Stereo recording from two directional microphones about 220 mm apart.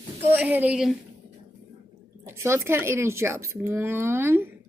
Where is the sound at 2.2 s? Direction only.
10° right (ahead or behind).